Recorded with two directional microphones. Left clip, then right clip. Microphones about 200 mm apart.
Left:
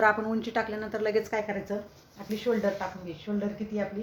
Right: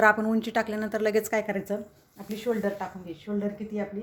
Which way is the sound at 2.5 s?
50° right (ahead or behind).